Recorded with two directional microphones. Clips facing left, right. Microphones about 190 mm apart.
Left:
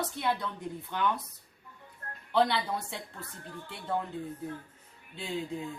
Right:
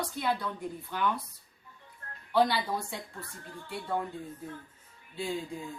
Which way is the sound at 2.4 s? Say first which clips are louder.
Right 1 dB; 25° left (ahead or behind).